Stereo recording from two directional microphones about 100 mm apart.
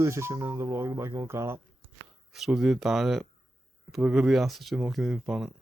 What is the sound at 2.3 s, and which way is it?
Speech, 5° right (ahead or behind).